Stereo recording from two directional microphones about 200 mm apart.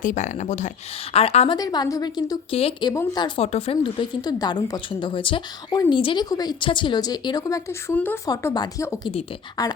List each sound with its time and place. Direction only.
0.0 s speech: 40° left (ahead or behind)
1.5 s speech: 20° left (ahead or behind)
2.9 s speech: 15° left (ahead or behind)